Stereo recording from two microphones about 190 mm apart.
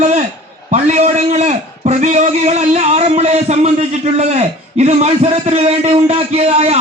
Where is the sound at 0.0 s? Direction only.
40° right (ahead or behind).